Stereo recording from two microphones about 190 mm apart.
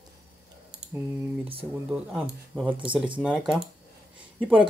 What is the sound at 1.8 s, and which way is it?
Speech, 5° right (ahead or behind).